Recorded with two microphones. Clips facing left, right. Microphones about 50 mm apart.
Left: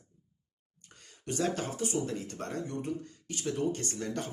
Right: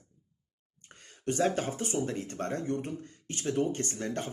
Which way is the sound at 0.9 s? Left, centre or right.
Right.